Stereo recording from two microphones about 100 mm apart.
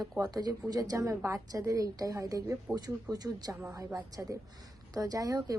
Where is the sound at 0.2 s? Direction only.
40° right (ahead or behind).